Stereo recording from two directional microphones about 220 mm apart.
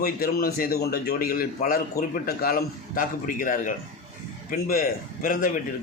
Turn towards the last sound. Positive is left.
turn(degrees=40)  # may be behind; listen again after turning